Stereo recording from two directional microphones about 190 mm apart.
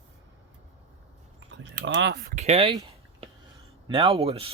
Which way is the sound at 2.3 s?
35° right (ahead or behind).